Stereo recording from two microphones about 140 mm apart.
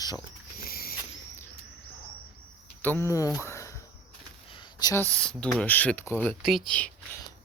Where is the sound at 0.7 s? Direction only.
90° left.